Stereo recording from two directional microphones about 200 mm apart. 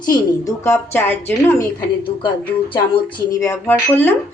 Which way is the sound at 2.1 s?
25° left (ahead or behind).